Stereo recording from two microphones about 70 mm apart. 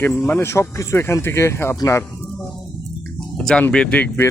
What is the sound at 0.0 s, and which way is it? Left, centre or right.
Speech, left.